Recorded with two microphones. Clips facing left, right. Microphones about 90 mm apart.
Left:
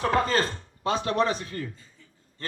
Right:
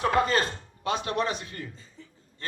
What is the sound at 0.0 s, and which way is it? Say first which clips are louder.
Speech: even; 35° left (ahead or behind).